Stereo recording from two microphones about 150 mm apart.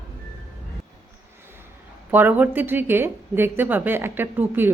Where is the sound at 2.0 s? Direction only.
10° right (ahead or behind).